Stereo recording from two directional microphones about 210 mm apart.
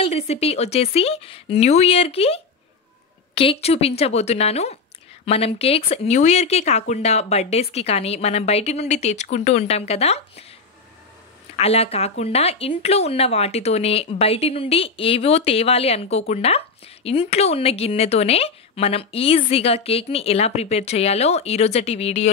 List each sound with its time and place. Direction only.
0.0 s speech: 30° left (ahead or behind)
11.5 s speech: 30° left (ahead or behind)